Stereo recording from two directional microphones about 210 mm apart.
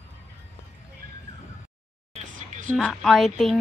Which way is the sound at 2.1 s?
35° right (ahead or behind).